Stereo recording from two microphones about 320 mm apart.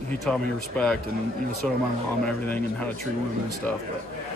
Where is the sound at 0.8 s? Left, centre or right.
Centre.